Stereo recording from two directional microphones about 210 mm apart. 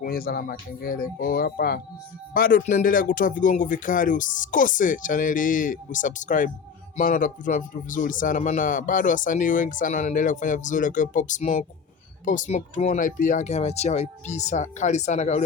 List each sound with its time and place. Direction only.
0.0 s speech: 45° left (ahead or behind)